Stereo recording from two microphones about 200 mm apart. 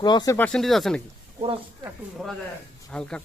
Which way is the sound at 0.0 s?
20° left (ahead or behind).